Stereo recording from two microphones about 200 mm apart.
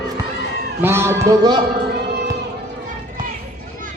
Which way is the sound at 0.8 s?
10° right (ahead or behind).